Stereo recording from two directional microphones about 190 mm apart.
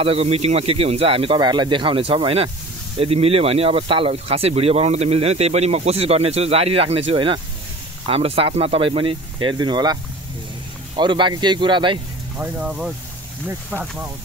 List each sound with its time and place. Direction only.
0.0 s speech: 30° right (ahead or behind)
11.0 s speech: 25° right (ahead or behind)
12.4 s speech: 5° right (ahead or behind)